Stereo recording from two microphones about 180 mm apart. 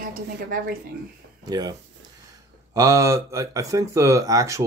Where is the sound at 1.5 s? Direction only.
20° right (ahead or behind).